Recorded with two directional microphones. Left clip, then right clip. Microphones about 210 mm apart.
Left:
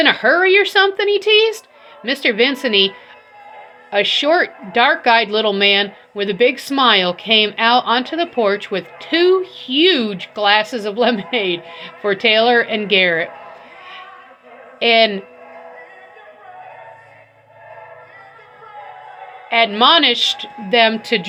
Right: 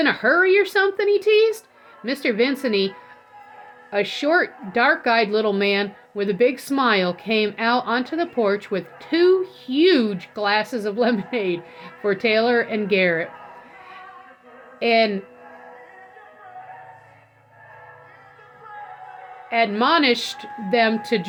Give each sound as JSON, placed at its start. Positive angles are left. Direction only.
{"t": 0.0, "sound": "a woman's voice", "side_deg": -20}
{"t": 14.8, "sound": "a woman's voice", "side_deg": -20}
{"t": 19.5, "sound": "a woman's voice", "side_deg": -20}